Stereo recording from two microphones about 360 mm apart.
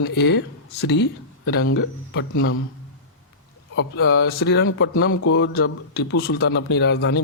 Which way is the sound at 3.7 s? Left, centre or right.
Left.